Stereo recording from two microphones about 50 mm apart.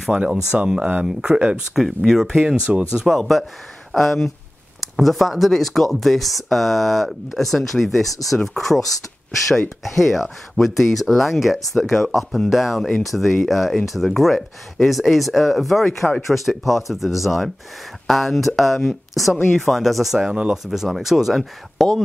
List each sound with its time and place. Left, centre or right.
0.1 s speech: centre
1.8 s speech: centre
2.4 s speech: right
3.2 s speech: centre
9.9 s speech: centre